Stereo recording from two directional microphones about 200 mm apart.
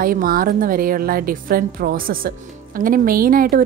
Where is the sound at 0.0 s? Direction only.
45° right (ahead or behind).